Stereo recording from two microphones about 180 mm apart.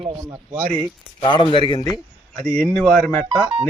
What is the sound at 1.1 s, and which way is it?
Speech, 25° left (ahead or behind).